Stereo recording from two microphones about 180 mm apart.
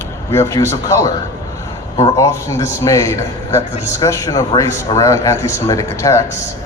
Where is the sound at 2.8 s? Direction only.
15° left (ahead or behind).